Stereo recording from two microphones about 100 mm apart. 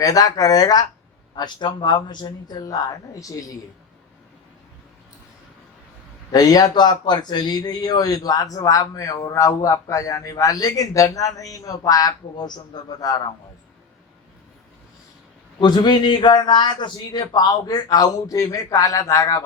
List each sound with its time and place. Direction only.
0.0 s speech: 35° left (ahead or behind)
6.3 s speech: 40° left (ahead or behind)
15.6 s speech: 45° left (ahead or behind)